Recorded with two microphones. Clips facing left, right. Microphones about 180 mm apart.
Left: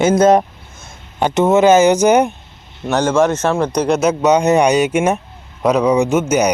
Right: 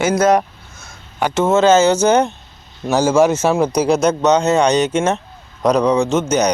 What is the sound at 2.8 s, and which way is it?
Speech, 5° right (ahead or behind).